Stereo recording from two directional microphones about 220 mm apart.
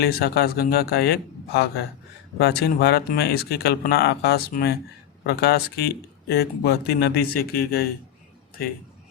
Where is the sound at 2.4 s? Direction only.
50° left (ahead or behind).